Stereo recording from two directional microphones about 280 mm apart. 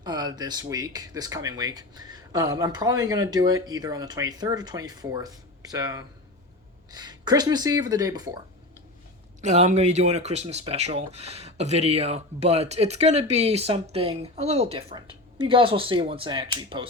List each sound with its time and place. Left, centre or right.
0.0 s speech: centre
9.4 s speech: right